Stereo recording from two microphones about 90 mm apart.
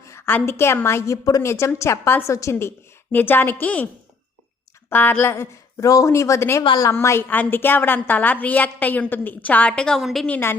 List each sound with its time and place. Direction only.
0.0 s a sound: 30° left (ahead or behind)
0.3 s a woman's voice: 25° left (ahead or behind)
4.9 s a woman's voice: 20° left (ahead or behind); by 10.2 s centre (ahead or behind)
10.2 s a woman's voice: 20° left (ahead or behind)